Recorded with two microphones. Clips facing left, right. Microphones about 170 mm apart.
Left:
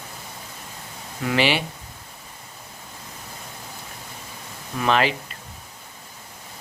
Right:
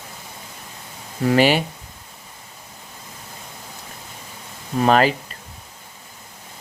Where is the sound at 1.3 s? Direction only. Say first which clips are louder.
Right 5 dB; 45° right (ahead or behind).